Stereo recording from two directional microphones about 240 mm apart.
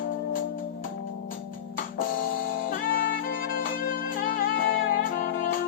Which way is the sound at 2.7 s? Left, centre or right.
Left.